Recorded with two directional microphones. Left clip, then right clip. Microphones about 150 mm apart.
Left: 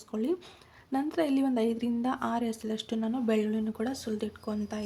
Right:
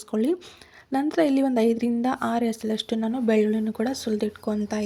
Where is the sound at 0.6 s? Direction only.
30° right (ahead or behind).